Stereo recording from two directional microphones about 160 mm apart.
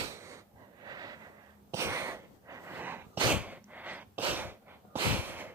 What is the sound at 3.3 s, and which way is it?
Gasp, 10° right (ahead or behind).